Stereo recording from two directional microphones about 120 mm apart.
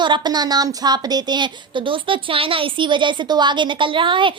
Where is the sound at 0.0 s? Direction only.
40° right (ahead or behind).